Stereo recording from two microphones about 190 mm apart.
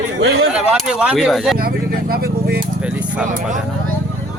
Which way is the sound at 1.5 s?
50° right (ahead or behind).